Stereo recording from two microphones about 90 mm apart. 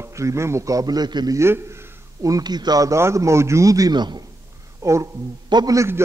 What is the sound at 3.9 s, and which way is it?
Speech, 55° right (ahead or behind).